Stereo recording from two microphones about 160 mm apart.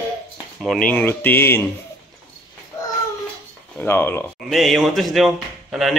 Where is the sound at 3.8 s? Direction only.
15° left (ahead or behind).